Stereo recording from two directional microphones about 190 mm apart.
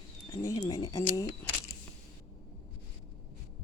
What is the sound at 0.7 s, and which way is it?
Bird, 20° left (ahead or behind).